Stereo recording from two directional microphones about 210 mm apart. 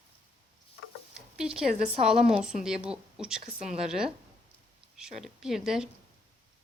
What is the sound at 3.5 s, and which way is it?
Speech, 40° right (ahead or behind).